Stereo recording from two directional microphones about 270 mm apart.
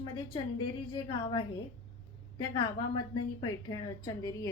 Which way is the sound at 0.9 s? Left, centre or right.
Centre.